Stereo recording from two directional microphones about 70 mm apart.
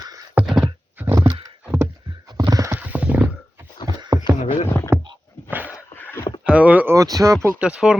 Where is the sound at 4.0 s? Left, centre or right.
Right.